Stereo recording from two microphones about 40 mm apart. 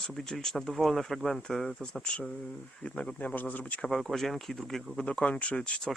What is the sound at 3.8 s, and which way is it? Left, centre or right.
Speech, centre.